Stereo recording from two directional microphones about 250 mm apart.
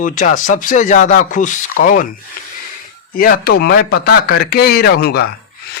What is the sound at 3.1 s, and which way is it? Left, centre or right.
Speech, left.